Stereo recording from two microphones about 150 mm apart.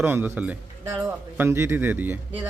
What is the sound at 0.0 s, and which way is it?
Speech, 15° right (ahead or behind).